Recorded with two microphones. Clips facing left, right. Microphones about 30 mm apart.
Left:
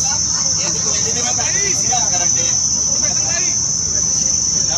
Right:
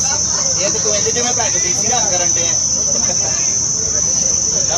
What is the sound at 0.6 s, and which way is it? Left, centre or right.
Speech, centre.